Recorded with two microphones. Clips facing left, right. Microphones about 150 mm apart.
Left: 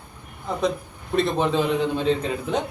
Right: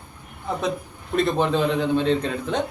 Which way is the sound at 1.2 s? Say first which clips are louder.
Right 1 dB; centre (ahead or behind).